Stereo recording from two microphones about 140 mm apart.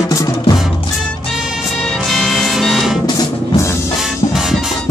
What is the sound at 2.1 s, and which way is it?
Music, centre (ahead or behind).